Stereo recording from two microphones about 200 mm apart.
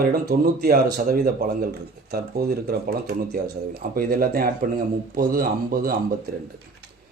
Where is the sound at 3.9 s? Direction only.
50° right (ahead or behind).